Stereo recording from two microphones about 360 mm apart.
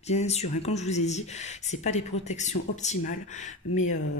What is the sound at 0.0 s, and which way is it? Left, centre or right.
Speech, centre.